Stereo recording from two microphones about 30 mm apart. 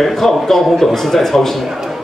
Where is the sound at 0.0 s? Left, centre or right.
Centre.